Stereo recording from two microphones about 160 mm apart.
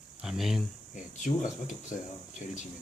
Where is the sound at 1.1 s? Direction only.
50° left (ahead or behind).